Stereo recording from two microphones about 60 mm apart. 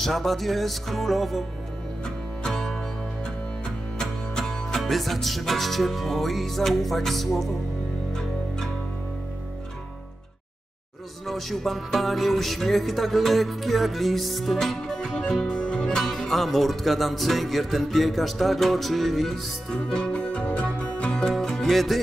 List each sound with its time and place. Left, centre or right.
0.0 s music: centre
2.4 s music: centre
11.2 s music: centre
16.0 s speech: centre
21.3 s music: centre